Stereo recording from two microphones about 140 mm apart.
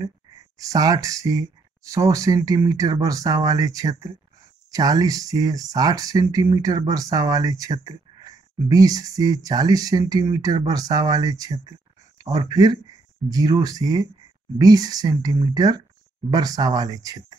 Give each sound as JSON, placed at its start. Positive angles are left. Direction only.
{"t": 0.6, "sound": "speech", "side_deg": -25}